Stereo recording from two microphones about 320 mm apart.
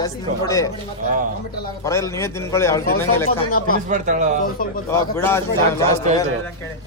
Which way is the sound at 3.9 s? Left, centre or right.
Right.